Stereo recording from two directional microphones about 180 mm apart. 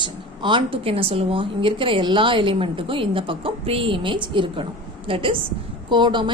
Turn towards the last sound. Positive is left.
turn(degrees=-25)  # may be behind; listen again after turning